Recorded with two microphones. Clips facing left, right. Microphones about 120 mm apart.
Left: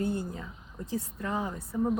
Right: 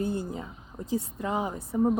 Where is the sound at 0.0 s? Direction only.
20° right (ahead or behind).